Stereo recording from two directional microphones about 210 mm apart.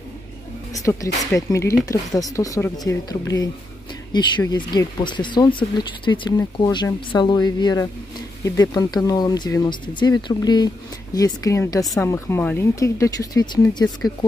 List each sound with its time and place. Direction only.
0.7 s speech: 15° left (ahead or behind)
11.8 s speech: centre (ahead or behind)
12.1 s speech: 10° left (ahead or behind)